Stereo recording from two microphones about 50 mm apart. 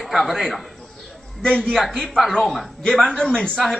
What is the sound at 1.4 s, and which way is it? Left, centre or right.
A man's voice, centre.